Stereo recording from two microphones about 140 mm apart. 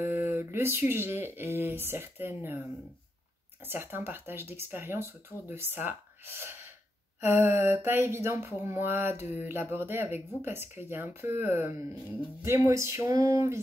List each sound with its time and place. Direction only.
0.0 s speech: 15° right (ahead or behind)
3.6 s speech: 15° right (ahead or behind)